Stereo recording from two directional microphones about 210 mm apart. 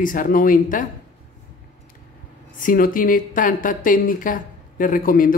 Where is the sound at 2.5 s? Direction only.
40° left (ahead or behind).